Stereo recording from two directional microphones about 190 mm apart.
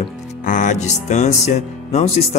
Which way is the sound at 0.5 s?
40° left (ahead or behind).